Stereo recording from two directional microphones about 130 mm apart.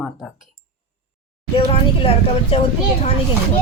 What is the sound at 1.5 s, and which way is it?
Speech, 50° left (ahead or behind).